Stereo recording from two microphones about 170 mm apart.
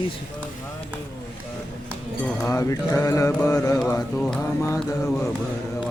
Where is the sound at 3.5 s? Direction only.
20° left (ahead or behind).